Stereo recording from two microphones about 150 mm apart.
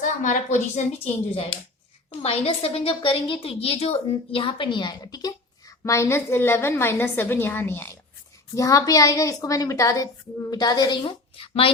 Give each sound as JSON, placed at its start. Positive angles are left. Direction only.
{"t": 0.0, "sound": "a woman's voice", "side_deg": 55}
{"t": 2.0, "sound": "a woman's voice", "side_deg": 40}